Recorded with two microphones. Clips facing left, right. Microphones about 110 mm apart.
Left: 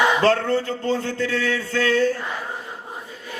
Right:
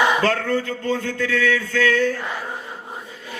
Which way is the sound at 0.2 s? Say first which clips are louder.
Left 2 dB; 30° left (ahead or behind).